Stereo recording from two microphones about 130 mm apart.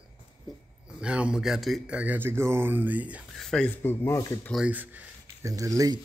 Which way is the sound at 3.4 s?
5° left (ahead or behind).